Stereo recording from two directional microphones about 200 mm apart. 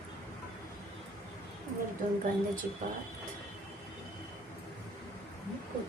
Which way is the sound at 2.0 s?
40° right (ahead or behind).